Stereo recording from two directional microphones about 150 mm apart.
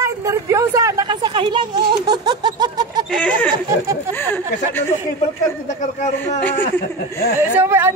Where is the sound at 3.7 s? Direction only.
20° right (ahead or behind).